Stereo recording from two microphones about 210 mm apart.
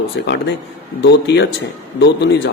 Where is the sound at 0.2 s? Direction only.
60° left (ahead or behind).